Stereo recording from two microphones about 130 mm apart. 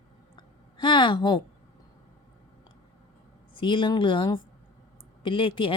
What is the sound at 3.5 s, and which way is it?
A woman's voice, 40° left (ahead or behind).